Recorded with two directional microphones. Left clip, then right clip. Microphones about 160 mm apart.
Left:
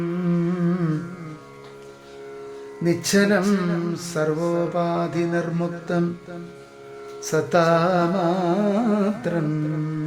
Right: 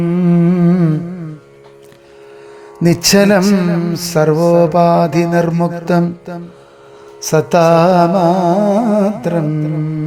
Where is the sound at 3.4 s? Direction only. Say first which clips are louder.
Right 8 dB; 30° right (ahead or behind).